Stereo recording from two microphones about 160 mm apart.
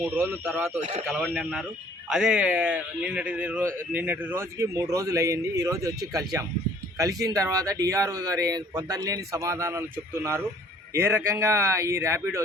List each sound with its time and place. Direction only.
0.0 s speech: 5° right (ahead or behind)
0.8 s a man's voice: 45° right (ahead or behind)
1.0 s a man's voice: 5° right (ahead or behind); by 9.8 s 20° right (ahead or behind)
10.9 s speech: 15° right (ahead or behind)